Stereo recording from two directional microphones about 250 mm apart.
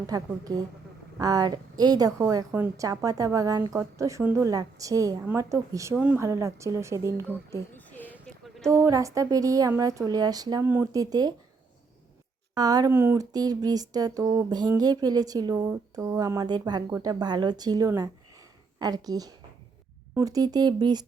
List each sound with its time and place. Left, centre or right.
0.1 s a woman's voice: centre
7.3 s a sound: centre
8.6 s a woman's voice: centre
12.5 s a woman's voice: centre